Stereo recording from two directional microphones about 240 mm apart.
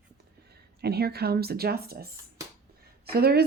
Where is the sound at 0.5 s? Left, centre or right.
Right.